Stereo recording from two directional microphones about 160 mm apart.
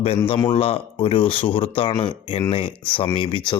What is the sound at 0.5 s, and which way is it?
Speech, 35° left (ahead or behind).